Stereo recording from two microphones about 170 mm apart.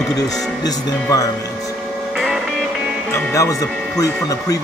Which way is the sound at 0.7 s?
20° left (ahead or behind).